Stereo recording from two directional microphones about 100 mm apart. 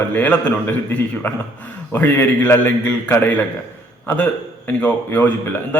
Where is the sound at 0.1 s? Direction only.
15° left (ahead or behind).